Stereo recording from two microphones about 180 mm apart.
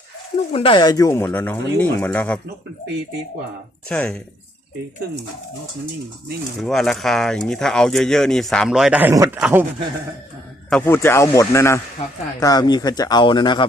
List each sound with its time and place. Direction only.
0.5 s speech: 30° left (ahead or behind); by 2.4 s 5° left (ahead or behind)
3.8 s speech: 5° left (ahead or behind)
6.6 s speech: centre (ahead or behind)
10.7 s speech: 10° left (ahead or behind); by 13.7 s 25° left (ahead or behind)